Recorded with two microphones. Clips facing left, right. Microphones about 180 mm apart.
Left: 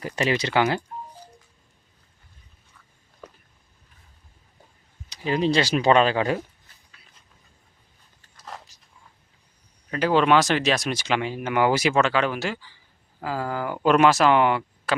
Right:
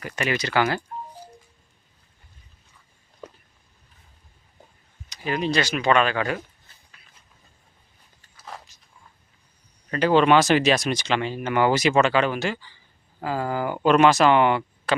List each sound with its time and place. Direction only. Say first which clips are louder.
0.0 s speech: left 2 dB; 25° left (ahead or behind)
5.0 s speech: left 3 dB; 30° left (ahead or behind)
8.4 s a sound: even; centre (ahead or behind)
9.9 s speech: right 2 dB; 5° left (ahead or behind)